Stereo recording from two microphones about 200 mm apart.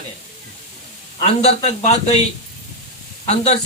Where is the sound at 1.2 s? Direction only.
30° left (ahead or behind).